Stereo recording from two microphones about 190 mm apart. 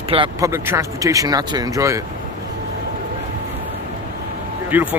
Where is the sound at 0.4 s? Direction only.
15° right (ahead or behind).